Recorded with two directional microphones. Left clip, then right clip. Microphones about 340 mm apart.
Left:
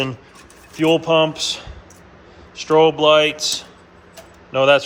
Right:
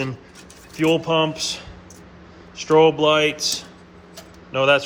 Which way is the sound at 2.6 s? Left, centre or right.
Centre.